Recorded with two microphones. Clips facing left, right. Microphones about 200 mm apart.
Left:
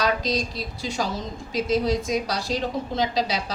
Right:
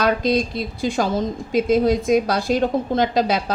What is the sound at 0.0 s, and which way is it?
A woman's voice, 55° right (ahead or behind).